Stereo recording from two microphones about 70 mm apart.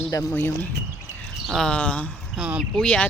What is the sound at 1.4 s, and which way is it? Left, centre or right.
Speech, centre.